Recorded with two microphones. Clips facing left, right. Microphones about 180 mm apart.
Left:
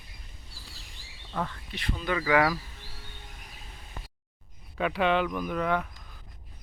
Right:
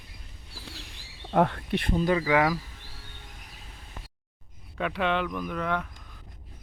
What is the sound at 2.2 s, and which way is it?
Speech, 20° right (ahead or behind).